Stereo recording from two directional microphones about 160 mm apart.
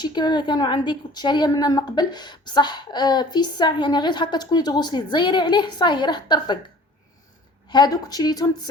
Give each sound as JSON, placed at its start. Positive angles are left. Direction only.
{"t": 0.0, "sound": "a woman's voice", "side_deg": 25}
{"t": 7.7, "sound": "a woman's voice", "side_deg": 25}